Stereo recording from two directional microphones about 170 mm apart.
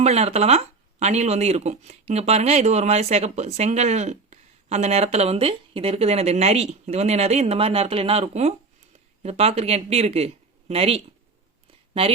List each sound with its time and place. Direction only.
0.0 s speech: 40° right (ahead or behind)